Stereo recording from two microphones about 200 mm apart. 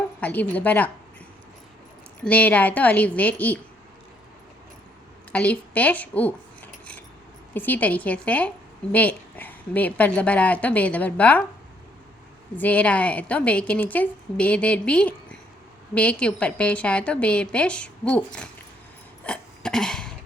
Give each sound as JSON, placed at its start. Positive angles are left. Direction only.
{"t": 0.2, "sound": "a woman's voice", "side_deg": 10}
{"t": 2.2, "sound": "a woman's voice", "side_deg": 10}
{"t": 5.3, "sound": "a woman's voice", "side_deg": 5}
{"t": 12.5, "sound": "a woman's voice", "side_deg": 5}
{"t": 19.2, "sound": "burping", "side_deg": 5}